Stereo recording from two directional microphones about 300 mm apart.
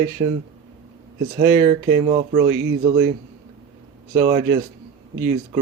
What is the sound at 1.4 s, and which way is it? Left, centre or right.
Speech, centre.